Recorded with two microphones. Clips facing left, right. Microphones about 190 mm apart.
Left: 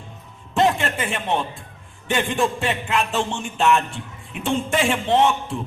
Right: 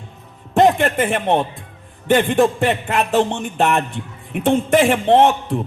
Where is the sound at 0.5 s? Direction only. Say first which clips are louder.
Right 6 dB; 50° right (ahead or behind).